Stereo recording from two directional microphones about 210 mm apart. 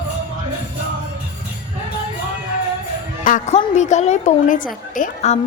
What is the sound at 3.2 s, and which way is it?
A woman's voice, 35° left (ahead or behind).